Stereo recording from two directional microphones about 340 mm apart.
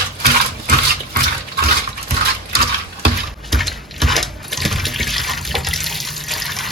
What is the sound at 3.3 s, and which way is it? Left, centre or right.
Water, centre.